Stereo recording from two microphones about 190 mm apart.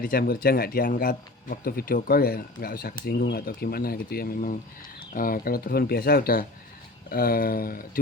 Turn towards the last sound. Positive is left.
turn(degrees=50)  # may be behind; listen again after turning